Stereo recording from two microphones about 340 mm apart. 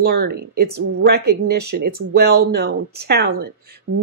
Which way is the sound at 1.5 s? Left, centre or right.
Right.